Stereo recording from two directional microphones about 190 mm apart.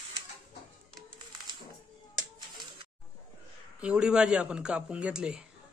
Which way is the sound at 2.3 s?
25° right (ahead or behind).